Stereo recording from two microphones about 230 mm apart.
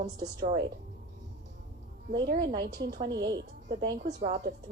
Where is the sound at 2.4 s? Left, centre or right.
Centre.